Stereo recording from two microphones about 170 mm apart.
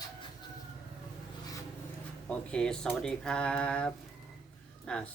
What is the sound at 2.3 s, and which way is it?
Speech, 5° left (ahead or behind).